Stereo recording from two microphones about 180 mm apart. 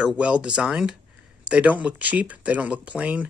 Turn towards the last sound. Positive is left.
turn(degrees=-5)  # may be behind; listen again after turning